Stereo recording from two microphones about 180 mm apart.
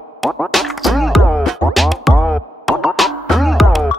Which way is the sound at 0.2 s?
Centre (ahead or behind).